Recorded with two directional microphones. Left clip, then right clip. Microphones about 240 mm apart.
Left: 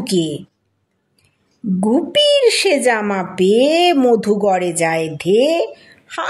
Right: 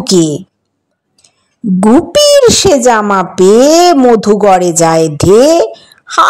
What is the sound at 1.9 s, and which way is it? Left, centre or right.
A child's voice, right.